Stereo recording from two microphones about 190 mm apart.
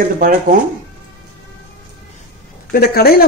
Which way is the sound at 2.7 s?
55° left (ahead or behind).